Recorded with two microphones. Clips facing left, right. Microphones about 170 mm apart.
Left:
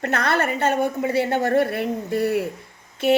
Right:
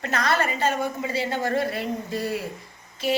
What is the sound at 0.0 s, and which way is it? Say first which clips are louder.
A woman's voice: left 2 dB; 60° left (ahead or behind).